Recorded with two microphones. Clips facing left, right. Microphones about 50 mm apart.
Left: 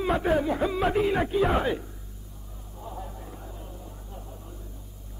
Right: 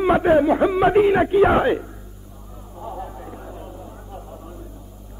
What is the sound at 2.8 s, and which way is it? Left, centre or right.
Vehicle, right.